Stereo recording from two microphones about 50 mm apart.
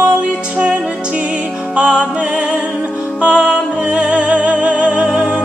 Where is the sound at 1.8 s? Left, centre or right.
Right.